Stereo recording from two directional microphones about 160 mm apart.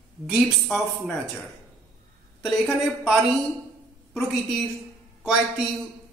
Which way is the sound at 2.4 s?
Centre (ahead or behind).